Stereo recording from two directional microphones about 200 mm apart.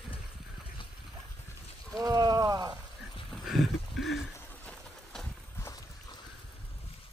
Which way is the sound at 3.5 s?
Centre (ahead or behind).